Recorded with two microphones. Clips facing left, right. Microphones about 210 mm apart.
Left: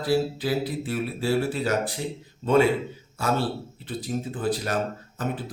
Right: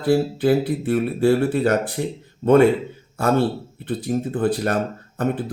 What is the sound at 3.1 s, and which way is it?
Speech, 55° right (ahead or behind).